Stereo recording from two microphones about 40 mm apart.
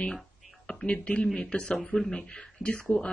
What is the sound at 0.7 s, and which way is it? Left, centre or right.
Speech, left.